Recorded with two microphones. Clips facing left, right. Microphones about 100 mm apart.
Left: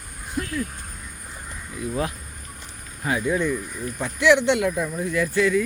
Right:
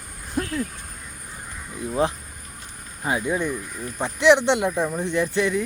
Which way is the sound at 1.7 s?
25° right (ahead or behind).